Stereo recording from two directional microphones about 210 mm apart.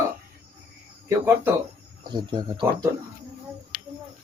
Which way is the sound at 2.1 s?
20° right (ahead or behind).